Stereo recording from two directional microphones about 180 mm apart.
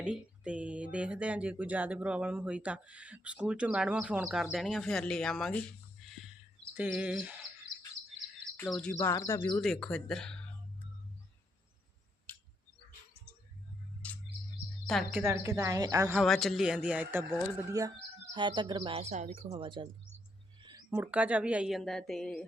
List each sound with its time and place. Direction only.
0.0 s speech: 5° right (ahead or behind)
8.6 s speech: 5° left (ahead or behind)
9.6 s a woman's voice: 5° left (ahead or behind)
15.1 s speech: 15° right (ahead or behind)
16.1 s a woman's voice: centre (ahead or behind); by 19.9 s 30° right (ahead or behind)
20.6 s a sound: 25° right (ahead or behind)
20.9 s a woman's voice: 10° right (ahead or behind)